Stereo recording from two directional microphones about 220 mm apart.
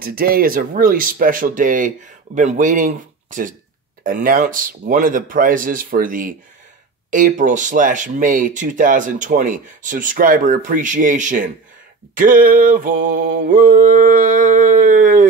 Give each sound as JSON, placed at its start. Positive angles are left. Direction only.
{"t": 0.0, "sound": "speech", "side_deg": -40}